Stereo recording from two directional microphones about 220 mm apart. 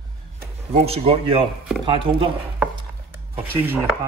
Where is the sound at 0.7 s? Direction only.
30° right (ahead or behind).